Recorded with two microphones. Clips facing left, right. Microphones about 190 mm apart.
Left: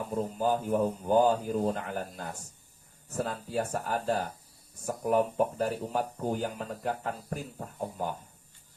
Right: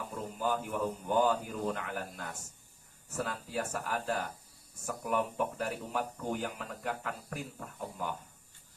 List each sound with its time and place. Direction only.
0.1 s speech: 35° left (ahead or behind)